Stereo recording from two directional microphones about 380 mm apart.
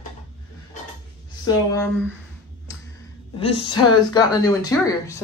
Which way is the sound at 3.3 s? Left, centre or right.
Centre.